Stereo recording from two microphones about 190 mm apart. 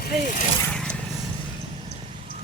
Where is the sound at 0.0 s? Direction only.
45° left (ahead or behind).